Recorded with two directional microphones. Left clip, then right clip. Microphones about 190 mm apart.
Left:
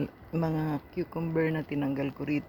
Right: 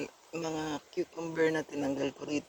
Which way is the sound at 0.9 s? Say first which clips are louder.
Left 2 dB; 20° right (ahead or behind).